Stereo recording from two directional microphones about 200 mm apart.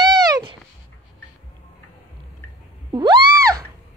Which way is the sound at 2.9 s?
20° right (ahead or behind).